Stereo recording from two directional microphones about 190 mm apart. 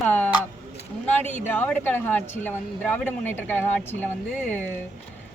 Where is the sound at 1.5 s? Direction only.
10° left (ahead or behind).